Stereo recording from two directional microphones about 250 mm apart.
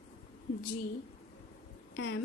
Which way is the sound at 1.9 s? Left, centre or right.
Left.